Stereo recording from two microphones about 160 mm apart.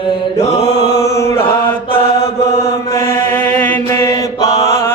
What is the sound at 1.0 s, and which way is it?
Chant, 20° left (ahead or behind).